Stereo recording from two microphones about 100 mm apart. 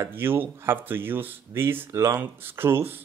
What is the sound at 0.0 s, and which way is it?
Speech, 20° right (ahead or behind).